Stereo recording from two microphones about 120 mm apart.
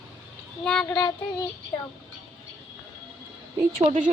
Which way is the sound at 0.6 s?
5° left (ahead or behind).